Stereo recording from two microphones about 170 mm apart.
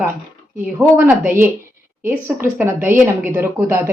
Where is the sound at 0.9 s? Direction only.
10° right (ahead or behind).